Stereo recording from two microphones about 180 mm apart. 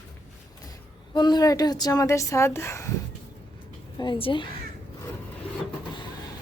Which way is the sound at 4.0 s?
30° left (ahead or behind).